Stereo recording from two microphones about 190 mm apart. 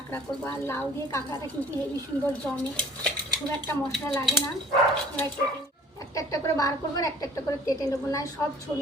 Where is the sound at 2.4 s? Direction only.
5° left (ahead or behind).